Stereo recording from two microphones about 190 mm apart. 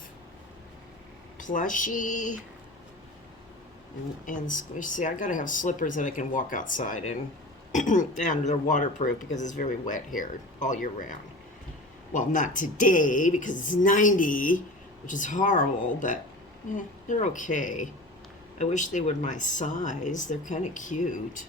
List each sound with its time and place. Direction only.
1.4 s speech: 45° left (ahead or behind)
4.3 s speech: 45° left (ahead or behind)